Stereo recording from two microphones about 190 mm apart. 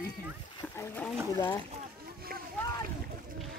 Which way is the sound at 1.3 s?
20° left (ahead or behind).